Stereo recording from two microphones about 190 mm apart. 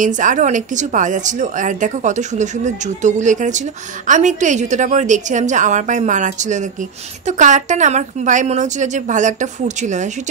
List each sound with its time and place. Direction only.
0.0 s a woman's voice: 40° right (ahead or behind)